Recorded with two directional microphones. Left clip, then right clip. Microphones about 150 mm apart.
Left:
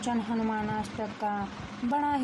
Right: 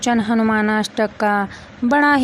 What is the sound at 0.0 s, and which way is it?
Speech, 55° right (ahead or behind).